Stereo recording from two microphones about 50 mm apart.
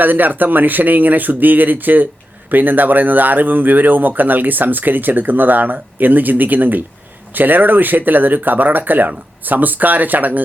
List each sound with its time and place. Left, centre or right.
0.0 s speech: right